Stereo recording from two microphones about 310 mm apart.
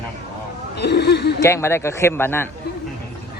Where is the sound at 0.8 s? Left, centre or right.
Left.